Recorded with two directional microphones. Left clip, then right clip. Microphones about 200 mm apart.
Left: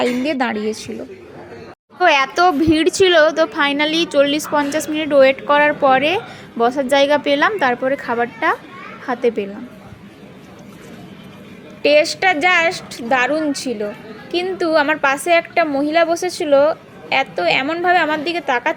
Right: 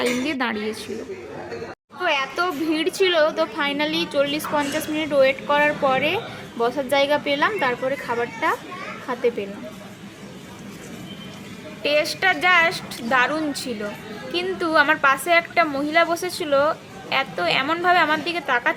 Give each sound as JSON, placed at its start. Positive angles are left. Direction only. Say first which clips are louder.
{"t": 0.0, "sound": "a woman's voice", "louder": "left 5 dB", "side_deg": 15}
{"t": 2.0, "sound": "speech", "louder": "left 9 dB", "side_deg": 30}
{"t": 11.8, "sound": "a woman's voice", "louder": "left 7 dB", "side_deg": 20}